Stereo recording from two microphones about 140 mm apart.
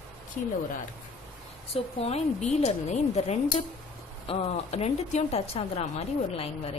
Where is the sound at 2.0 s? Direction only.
50° left (ahead or behind).